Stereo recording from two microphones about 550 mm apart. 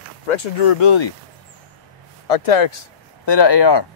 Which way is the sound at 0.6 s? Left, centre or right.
Left.